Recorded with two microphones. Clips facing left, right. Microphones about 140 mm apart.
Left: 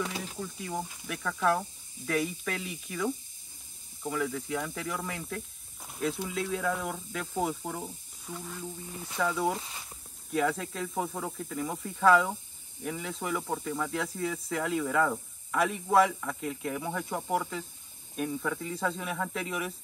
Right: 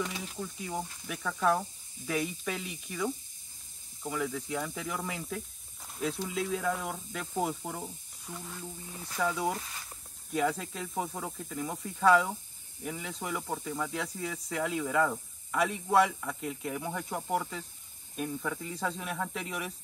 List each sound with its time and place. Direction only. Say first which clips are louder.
0.2 s speech: left 1 dB; centre (ahead or behind)
9.6 s speech: left 1 dB; 20° left (ahead or behind)
10.3 s speech: left 1 dB; centre (ahead or behind)